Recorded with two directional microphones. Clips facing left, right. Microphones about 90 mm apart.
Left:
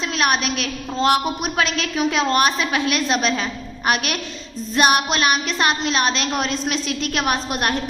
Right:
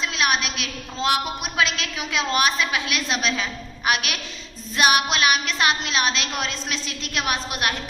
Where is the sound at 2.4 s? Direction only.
40° left (ahead or behind).